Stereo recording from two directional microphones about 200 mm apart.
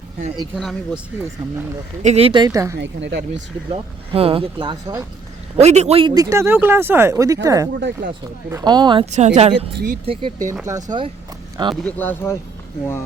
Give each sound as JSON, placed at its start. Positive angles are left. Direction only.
{"t": 0.5, "sound": "speech", "side_deg": 0}
{"t": 2.0, "sound": "speech", "side_deg": -35}
{"t": 2.7, "sound": "speech", "side_deg": -60}
{"t": 3.7, "sound": "speech", "side_deg": -30}
{"t": 7.8, "sound": "speech", "side_deg": -60}
{"t": 8.4, "sound": "speech", "side_deg": -15}
{"t": 9.0, "sound": "speech", "side_deg": -35}
{"t": 9.7, "sound": "speech", "side_deg": -45}
{"t": 10.1, "sound": "speech", "side_deg": -25}
{"t": 10.5, "sound": "speech", "side_deg": -15}
{"t": 11.7, "sound": "speech", "side_deg": 5}